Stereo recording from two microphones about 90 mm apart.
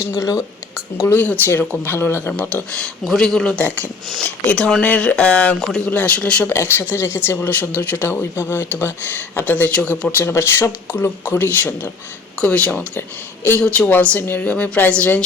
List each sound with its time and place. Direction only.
0.0 s speech: 35° left (ahead or behind)
1.0 s speech: 20° left (ahead or behind)
2.7 s speech: 5° left (ahead or behind)
6.5 s speech: 30° left (ahead or behind)